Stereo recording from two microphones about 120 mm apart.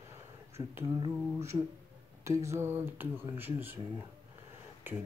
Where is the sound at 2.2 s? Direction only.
25° right (ahead or behind).